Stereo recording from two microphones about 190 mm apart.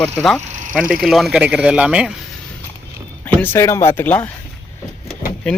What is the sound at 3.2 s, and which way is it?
Speech, 10° left (ahead or behind).